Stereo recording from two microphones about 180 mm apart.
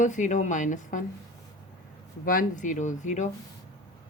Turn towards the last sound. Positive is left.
turn(degrees=45)  # may be behind; listen again after turning